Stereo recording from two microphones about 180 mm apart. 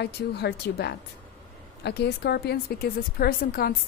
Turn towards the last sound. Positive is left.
turn(degrees=55)  # may be behind; listen again after turning